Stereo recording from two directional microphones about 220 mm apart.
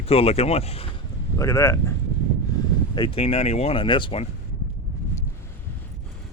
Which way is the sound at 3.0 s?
25° left (ahead or behind).